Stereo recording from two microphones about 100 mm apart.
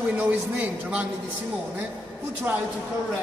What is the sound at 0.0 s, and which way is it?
A man's voice, 15° right (ahead or behind).